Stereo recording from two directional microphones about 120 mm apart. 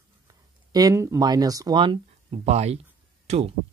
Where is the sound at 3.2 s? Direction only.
55° right (ahead or behind).